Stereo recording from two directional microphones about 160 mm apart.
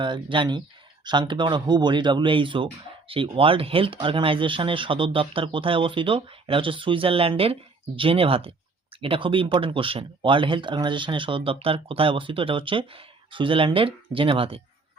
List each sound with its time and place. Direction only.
0.0 s speech: 30° right (ahead or behind)